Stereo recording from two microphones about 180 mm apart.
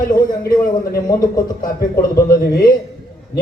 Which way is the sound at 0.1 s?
20° left (ahead or behind).